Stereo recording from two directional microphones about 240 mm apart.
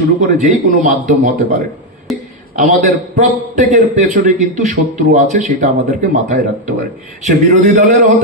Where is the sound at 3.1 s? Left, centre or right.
Right.